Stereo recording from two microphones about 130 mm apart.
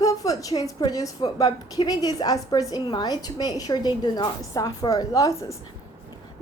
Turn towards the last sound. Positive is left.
turn(degrees=25)  # may be behind; listen again after turning